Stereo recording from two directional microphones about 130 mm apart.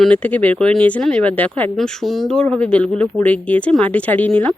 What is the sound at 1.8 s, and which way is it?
Speech, centre (ahead or behind).